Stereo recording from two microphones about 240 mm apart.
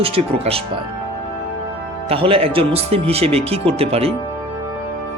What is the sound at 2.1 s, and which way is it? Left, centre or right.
Speech, right.